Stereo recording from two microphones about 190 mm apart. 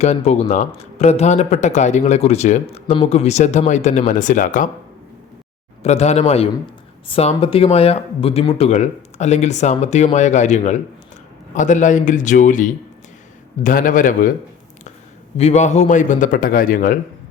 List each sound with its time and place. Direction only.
0.0 s speech: 35° left (ahead or behind)
5.8 s a man's voice: 35° left (ahead or behind)
15.4 s a man's voice: 35° left (ahead or behind)